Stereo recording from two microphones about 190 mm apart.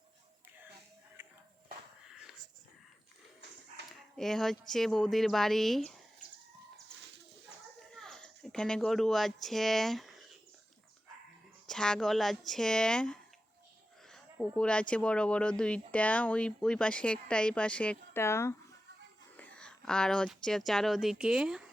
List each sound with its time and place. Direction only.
4.2 s speech: centre (ahead or behind)
7.9 s speech: 5° left (ahead or behind)
11.6 s speech: 5° left (ahead or behind)